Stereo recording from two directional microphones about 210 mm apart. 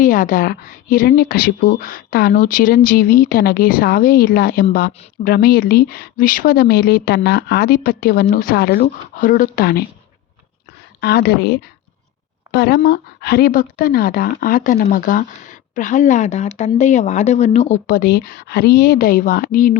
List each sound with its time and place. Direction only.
0.0 s speech: 40° left (ahead or behind)
11.0 s speech: 50° left (ahead or behind)